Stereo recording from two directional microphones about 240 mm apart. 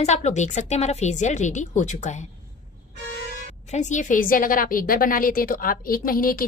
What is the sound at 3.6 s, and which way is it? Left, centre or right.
A woman's voice, left.